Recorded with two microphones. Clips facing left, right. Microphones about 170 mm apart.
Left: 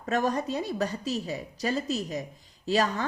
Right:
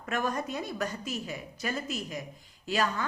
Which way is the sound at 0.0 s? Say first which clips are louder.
Left 4 dB; 35° left (ahead or behind).